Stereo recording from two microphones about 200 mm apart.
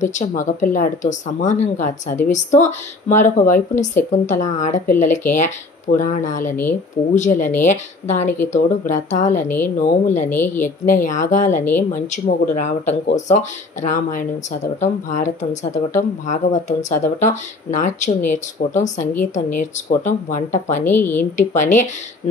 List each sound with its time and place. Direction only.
0.0 s speech: 40° left (ahead or behind)
10.3 s a woman's voice: 10° left (ahead or behind)
10.6 s speech: 40° left (ahead or behind)
20.8 s a woman's voice: 10° left (ahead or behind)
21.4 s speech: 40° left (ahead or behind)